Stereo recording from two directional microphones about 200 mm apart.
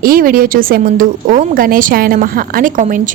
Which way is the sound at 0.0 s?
45° right (ahead or behind).